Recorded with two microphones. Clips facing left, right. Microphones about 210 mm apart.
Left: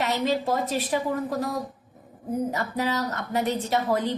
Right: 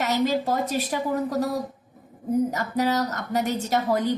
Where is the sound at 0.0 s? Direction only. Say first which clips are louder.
Right 2 dB; 45° right (ahead or behind).